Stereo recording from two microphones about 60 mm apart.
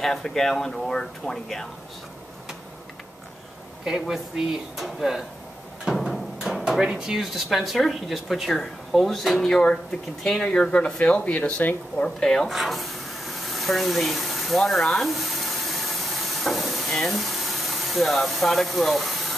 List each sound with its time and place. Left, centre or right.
0.0 s speech: centre
4.0 s speech: centre
12.4 s a sound: centre
16.9 s speech: centre